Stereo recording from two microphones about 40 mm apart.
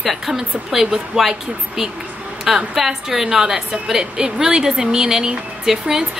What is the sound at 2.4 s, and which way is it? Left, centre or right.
A woman's voice, centre.